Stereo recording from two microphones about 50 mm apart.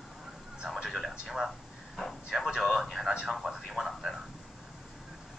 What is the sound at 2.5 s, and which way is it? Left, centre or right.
Speech, centre.